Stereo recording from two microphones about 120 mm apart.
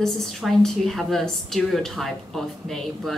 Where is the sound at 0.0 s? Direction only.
5° left (ahead or behind).